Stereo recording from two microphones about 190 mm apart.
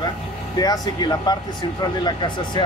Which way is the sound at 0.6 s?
20° left (ahead or behind).